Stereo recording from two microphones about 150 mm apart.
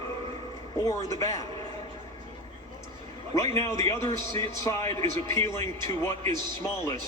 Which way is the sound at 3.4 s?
20° left (ahead or behind).